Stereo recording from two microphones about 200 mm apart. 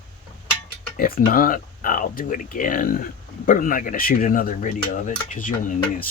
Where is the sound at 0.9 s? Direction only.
45° left (ahead or behind).